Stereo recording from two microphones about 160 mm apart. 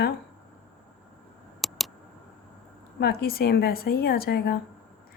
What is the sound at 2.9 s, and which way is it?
A woman's voice, 80° left.